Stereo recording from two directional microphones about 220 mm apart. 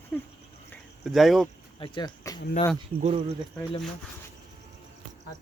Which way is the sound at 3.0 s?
30° right (ahead or behind).